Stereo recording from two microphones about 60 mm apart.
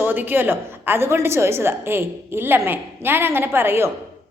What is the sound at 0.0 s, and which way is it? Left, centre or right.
A woman's voice, right.